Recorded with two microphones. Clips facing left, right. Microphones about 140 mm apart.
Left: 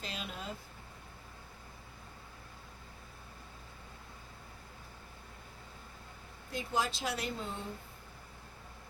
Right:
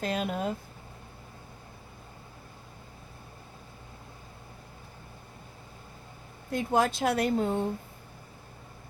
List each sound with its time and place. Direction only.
0.0 s a woman's voice: 55° right (ahead or behind)
6.5 s a woman's voice: 55° right (ahead or behind)